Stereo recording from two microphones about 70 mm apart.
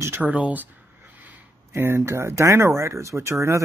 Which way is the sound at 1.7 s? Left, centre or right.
Right.